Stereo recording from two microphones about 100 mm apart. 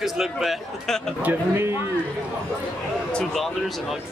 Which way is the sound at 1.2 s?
25° right (ahead or behind).